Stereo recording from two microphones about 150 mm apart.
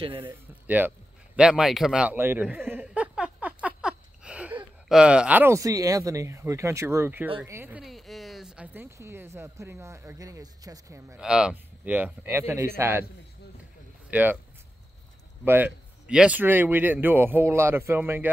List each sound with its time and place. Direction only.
0.2 s a man's voice: 15° right (ahead or behind)
4.2 s sniff: 10° right (ahead or behind)
4.8 s speech: 5° right (ahead or behind)
7.8 s a sound: centre (ahead or behind)
8.8 s speech: 20° right (ahead or behind)
11.1 s speech: 5° right (ahead or behind)
14.1 s speech: 10° right (ahead or behind)
15.4 s speech: 15° right (ahead or behind)